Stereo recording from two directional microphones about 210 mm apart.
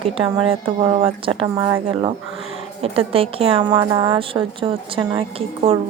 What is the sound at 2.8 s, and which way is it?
A woman's voice, 25° right (ahead or behind).